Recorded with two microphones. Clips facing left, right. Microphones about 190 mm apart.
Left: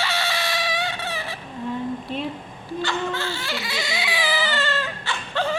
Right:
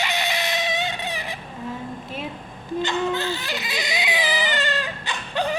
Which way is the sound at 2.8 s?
20° right (ahead or behind).